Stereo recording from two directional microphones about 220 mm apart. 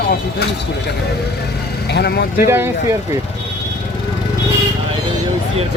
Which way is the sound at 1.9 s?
50° left (ahead or behind).